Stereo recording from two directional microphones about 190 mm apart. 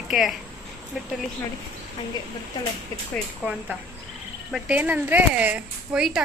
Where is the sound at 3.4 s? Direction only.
10° right (ahead or behind).